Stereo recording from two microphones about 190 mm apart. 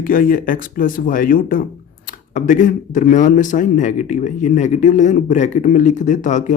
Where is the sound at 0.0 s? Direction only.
45° left (ahead or behind).